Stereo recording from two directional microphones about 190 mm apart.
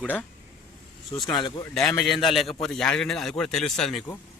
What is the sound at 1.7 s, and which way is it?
Speech, centre (ahead or behind).